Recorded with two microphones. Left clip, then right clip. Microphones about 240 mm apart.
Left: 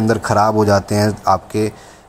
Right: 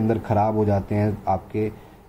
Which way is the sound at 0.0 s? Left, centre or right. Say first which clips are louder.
Left 7 dB; left.